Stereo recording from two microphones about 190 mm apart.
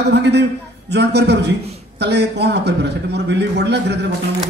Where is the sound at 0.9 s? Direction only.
60° right (ahead or behind).